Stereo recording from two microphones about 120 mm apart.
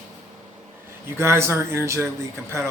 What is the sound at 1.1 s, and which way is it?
Speech, 20° right (ahead or behind).